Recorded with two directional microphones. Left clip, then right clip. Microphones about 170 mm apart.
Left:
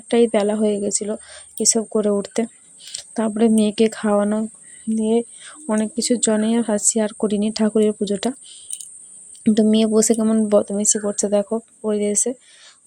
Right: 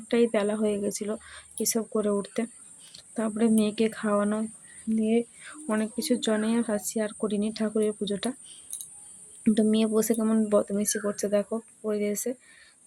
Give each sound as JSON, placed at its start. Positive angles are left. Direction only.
{"t": 0.1, "sound": "speech", "side_deg": 35}